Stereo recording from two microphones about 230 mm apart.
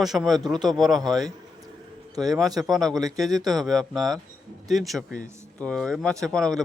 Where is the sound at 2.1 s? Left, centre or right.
Centre.